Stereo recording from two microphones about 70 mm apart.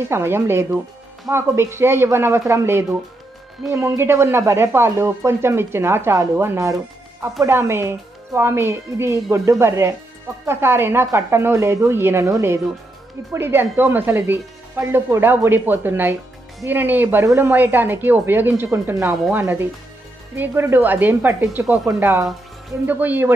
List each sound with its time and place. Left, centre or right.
0.1 s speech: right
12.3 s speech: right
13.3 s speech: right
22.8 s speech: right